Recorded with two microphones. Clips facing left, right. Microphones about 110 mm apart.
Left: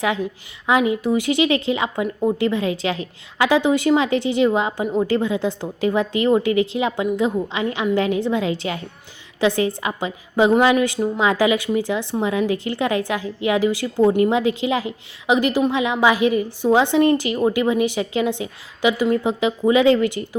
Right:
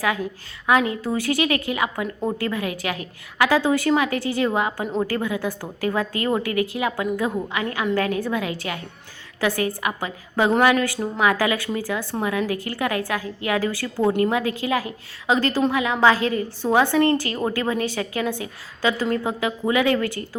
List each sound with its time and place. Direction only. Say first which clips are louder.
0.7 s a woman's voice: left 3 dB; 15° left (ahead or behind)